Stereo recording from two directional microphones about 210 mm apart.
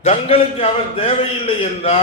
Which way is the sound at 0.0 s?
30° left (ahead or behind).